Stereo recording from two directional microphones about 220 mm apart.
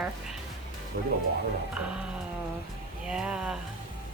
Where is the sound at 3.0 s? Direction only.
5° right (ahead or behind).